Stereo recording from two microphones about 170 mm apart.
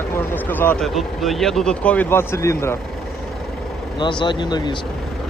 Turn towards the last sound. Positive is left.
turn(degrees=25)  # may be behind; listen again after turning